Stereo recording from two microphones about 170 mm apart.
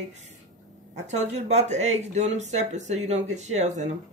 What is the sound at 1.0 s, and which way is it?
Speech, 40° right (ahead or behind).